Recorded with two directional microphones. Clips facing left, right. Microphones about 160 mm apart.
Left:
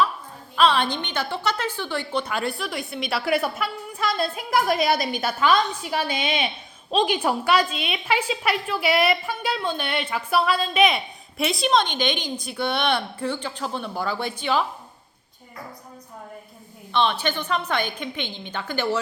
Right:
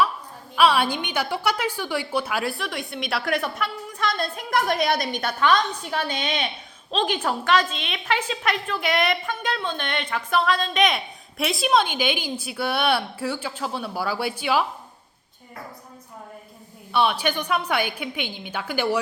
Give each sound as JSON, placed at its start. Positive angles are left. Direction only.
{"t": 0.5, "sound": "a woman's voice", "side_deg": -10}
{"t": 16.9, "sound": "a woman's voice", "side_deg": -10}